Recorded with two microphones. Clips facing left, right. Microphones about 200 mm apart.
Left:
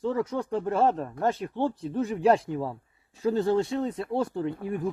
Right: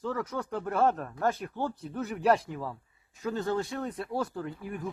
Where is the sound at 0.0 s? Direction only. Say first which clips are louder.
Left 5 dB; 30° left (ahead or behind).